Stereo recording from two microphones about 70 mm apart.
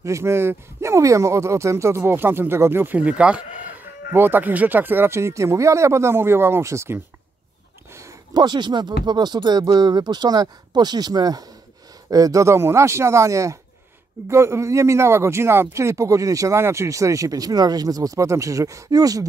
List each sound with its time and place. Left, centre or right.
0.0 s speech: right
3.0 s speech: centre
4.1 s speech: right
8.3 s speech: right
12.1 s speech: right
12.5 s speech: right